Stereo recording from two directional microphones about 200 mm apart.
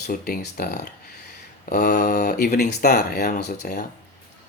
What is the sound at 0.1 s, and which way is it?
Speech, 45° left (ahead or behind).